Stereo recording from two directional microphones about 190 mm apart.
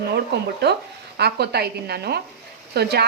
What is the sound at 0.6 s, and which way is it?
A woman's voice, 60° right (ahead or behind).